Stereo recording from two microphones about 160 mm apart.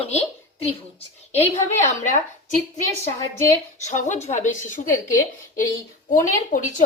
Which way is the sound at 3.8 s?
45° left (ahead or behind).